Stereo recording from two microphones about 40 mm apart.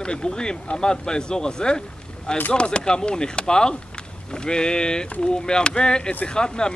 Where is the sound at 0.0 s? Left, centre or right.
Left.